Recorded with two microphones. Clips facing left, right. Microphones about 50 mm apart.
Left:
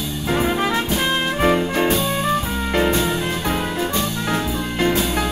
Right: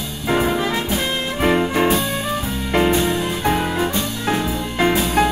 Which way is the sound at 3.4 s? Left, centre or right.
Centre.